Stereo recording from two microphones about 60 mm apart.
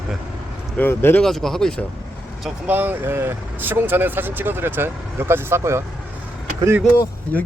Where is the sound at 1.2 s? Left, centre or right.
Centre.